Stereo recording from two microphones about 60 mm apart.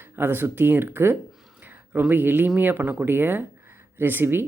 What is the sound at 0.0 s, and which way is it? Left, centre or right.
Speech, right.